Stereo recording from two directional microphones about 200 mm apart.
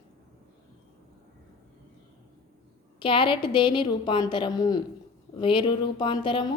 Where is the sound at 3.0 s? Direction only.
25° left (ahead or behind).